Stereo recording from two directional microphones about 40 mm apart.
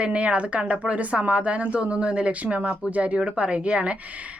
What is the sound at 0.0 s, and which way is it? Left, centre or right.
A woman's voice, right.